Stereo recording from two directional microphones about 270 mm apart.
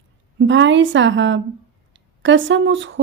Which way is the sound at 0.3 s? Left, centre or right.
Right.